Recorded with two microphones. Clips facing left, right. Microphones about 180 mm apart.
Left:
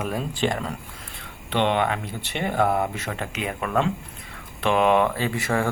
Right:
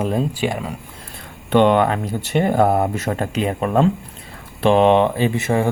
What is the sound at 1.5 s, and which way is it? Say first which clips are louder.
Speech: right 8 dB; 45° right (ahead or behind).